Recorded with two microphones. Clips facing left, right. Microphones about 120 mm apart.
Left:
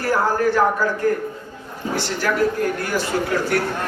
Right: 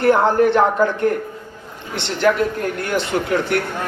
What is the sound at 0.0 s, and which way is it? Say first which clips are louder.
A man's voice: right 5 dB; 25° right (ahead or behind).